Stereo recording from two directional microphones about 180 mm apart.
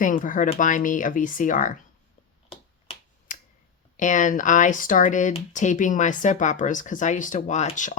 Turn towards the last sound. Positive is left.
turn(degrees=40)  # may be behind; listen again after turning